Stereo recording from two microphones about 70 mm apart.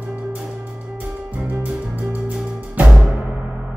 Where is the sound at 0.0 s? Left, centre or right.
Centre.